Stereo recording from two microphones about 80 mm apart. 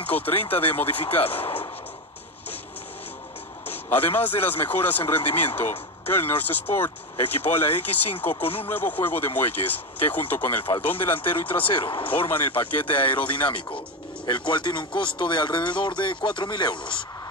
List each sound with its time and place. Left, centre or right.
0.0 s speech: left
3.6 s speech: left
11.6 s speech: left
12.3 s speech: left
14.3 s speech: left